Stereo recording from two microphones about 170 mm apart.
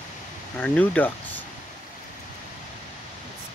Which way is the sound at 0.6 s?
10° left (ahead or behind).